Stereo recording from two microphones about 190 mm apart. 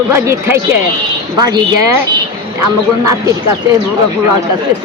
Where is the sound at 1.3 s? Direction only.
20° right (ahead or behind).